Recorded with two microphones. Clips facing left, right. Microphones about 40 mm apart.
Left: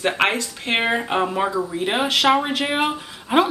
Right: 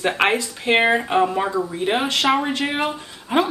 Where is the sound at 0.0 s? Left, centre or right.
Centre.